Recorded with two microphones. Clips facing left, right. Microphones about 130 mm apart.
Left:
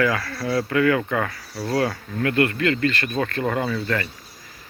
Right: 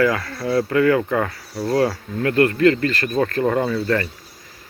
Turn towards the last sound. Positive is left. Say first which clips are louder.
# right 4 dB
turn(degrees=-30)  # may be behind; listen again after turning